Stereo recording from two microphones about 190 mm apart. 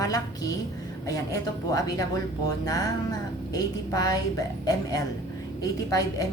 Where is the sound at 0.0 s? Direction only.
20° left (ahead or behind).